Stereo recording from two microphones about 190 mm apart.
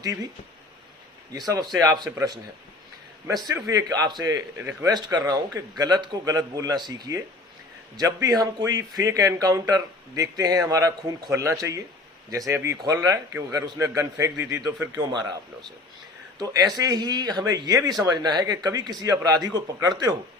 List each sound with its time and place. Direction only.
0.0 s a man's voice: 20° right (ahead or behind)
1.3 s speech: 20° right (ahead or behind)
3.5 s a man's voice: 20° right (ahead or behind)
16.4 s speech: 20° right (ahead or behind)